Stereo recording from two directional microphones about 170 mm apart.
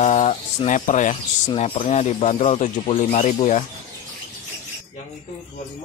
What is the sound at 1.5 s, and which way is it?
Speech, 35° left (ahead or behind).